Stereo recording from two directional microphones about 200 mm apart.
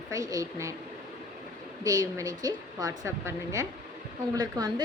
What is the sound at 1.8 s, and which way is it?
A woman's voice, 15° right (ahead or behind).